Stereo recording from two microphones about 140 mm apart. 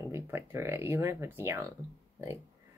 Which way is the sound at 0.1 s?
20° right (ahead or behind).